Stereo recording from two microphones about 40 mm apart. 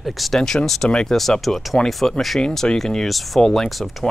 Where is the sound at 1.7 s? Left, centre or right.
Centre.